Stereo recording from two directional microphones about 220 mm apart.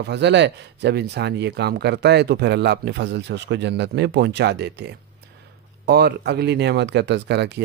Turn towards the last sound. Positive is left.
turn(degrees=-50)  # may be behind; listen again after turning